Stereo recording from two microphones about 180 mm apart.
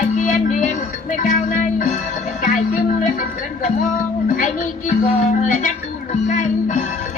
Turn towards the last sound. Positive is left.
turn(degrees=40)  # may be behind; listen again after turning